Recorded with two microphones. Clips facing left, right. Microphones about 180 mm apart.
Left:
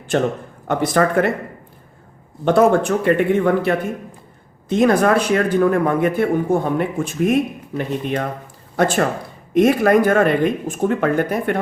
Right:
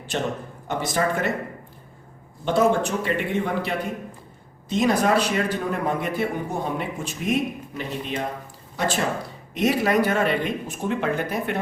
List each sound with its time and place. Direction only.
0.7 s a man's voice: 55° left (ahead or behind)
2.4 s a man's voice: 55° left (ahead or behind)